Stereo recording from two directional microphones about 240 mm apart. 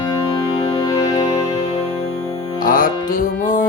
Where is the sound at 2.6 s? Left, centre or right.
Left.